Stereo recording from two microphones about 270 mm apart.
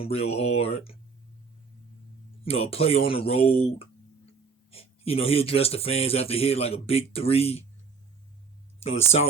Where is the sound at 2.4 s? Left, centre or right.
Left.